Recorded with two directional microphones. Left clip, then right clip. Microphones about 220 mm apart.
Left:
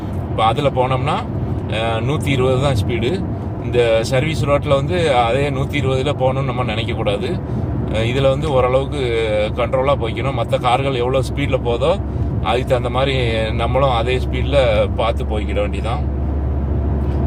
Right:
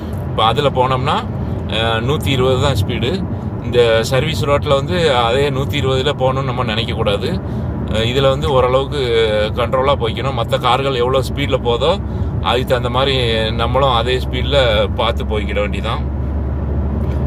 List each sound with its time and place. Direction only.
0.3 s speech: 15° right (ahead or behind)